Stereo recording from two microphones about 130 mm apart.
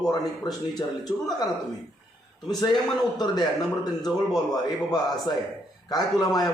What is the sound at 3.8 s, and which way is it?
A man's voice, 30° left (ahead or behind).